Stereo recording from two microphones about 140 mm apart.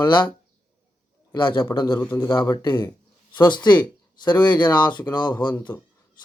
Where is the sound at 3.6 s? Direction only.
30° left (ahead or behind).